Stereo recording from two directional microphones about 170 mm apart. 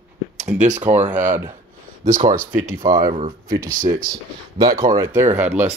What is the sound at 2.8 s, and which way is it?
Speech, 20° right (ahead or behind).